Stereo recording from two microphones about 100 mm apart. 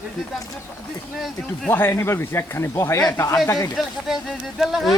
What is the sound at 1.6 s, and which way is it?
Speech, 20° left (ahead or behind).